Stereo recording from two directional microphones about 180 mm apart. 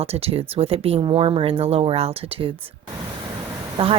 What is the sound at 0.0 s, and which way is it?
Speech, 35° right (ahead or behind).